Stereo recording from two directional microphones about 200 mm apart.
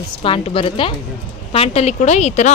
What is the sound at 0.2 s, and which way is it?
A woman's voice, 25° left (ahead or behind).